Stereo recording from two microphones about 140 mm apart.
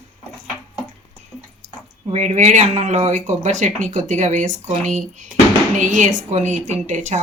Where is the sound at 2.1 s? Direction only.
55° right (ahead or behind).